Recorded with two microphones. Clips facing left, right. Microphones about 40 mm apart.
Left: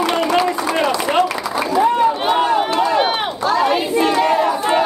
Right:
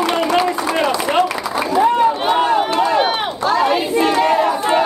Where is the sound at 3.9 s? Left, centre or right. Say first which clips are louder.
Even; right.